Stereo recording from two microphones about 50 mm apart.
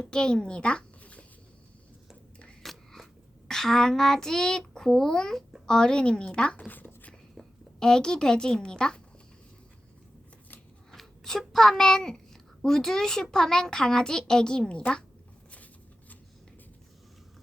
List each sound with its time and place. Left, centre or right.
0.0 s a child's voice: centre
2.6 s a sound: centre
3.5 s a child's voice: centre
6.7 s a sound: left
7.8 s a child's voice: centre
10.9 s a child's voice: centre; by 15.0 s left
15.5 s shuffling cards: left